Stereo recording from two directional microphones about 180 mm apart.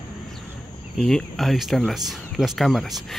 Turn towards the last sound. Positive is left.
turn(degrees=0)  # may be behind; listen again after turning